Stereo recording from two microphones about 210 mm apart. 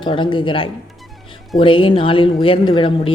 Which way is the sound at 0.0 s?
25° left (ahead or behind).